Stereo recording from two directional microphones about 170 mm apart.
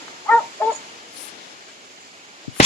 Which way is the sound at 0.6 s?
10° left (ahead or behind).